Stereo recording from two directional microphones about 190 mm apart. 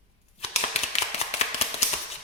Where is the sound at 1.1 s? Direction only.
35° left (ahead or behind).